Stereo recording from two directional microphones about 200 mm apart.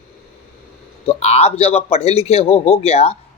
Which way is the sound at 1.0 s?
30° left (ahead or behind).